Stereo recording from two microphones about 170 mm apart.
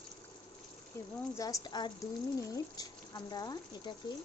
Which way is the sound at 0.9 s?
20° left (ahead or behind).